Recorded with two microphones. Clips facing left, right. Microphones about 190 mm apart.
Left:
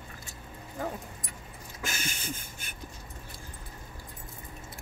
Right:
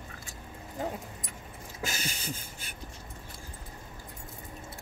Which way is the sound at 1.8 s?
35° right (ahead or behind).